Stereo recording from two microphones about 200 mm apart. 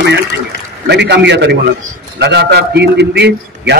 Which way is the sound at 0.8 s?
60° right (ahead or behind).